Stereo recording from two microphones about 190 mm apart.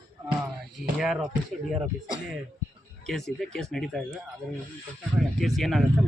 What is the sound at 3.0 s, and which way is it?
Speech, centre (ahead or behind).